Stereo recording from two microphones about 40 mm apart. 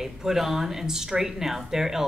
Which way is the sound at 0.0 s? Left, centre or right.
Centre.